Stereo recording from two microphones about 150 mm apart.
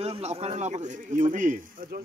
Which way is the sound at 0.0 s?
45° right (ahead or behind).